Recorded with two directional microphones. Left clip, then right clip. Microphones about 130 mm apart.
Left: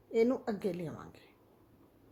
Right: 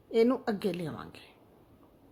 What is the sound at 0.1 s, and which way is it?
A woman's voice, 25° right (ahead or behind).